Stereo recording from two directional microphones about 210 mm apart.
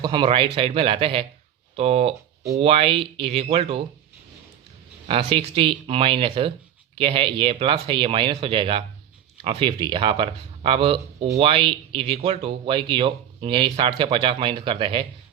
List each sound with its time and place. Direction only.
0.0 s speech: 25° right (ahead or behind)
5.0 s speech: 25° right (ahead or behind)